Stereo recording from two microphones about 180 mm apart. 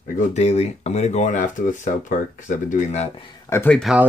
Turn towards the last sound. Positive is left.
turn(degrees=-5)  # may be behind; listen again after turning